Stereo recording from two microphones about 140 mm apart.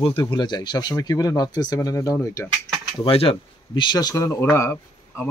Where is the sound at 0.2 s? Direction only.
30° left (ahead or behind).